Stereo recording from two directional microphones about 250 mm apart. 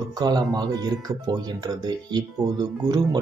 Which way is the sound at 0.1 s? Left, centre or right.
Centre.